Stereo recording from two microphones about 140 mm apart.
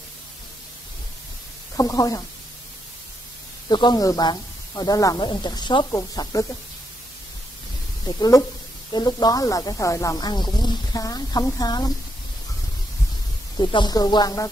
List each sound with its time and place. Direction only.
1.8 s speech: 25° left (ahead or behind)
3.6 s speech: 30° left (ahead or behind)
8.2 s speech: 25° left (ahead or behind)
13.6 s speech: 30° left (ahead or behind)